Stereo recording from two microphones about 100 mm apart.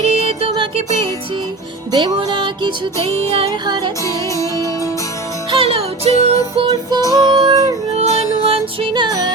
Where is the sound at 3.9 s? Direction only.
30° left (ahead or behind).